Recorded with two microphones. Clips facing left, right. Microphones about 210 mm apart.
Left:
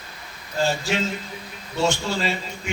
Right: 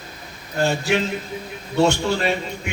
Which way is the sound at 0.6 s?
65° right (ahead or behind).